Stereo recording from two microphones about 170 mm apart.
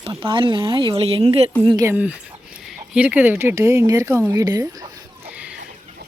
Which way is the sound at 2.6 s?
5° right (ahead or behind).